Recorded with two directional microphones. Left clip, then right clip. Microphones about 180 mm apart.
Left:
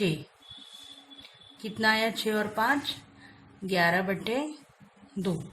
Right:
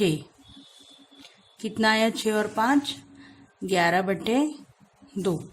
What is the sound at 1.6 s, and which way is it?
Speech, 30° right (ahead or behind).